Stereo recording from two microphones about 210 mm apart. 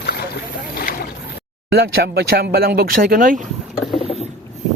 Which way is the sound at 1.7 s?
50° right (ahead or behind).